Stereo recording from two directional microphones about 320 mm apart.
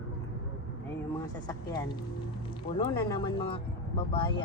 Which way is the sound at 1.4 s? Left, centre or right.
Centre.